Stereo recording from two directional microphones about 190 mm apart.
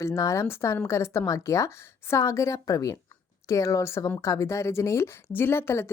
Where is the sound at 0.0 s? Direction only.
15° left (ahead or behind).